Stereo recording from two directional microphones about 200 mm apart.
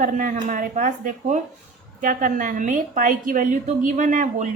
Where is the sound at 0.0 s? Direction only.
40° right (ahead or behind).